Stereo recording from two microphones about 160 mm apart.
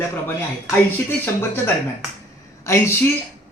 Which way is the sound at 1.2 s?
15° left (ahead or behind).